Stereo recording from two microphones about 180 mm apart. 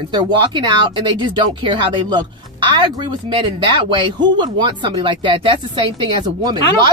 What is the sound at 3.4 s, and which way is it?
Speech, 25° right (ahead or behind).